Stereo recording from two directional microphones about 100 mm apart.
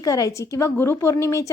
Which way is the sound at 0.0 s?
35° left (ahead or behind).